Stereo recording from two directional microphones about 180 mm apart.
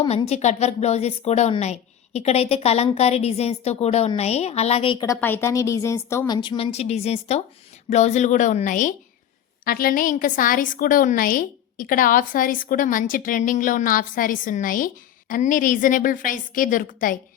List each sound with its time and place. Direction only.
0.0 s a woman's voice: 35° left (ahead or behind)
5.2 s a woman's voice: 10° left (ahead or behind); by 17.2 s 50° left (ahead or behind)